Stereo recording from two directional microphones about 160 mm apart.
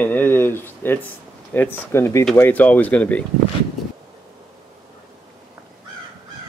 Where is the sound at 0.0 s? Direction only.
10° left (ahead or behind).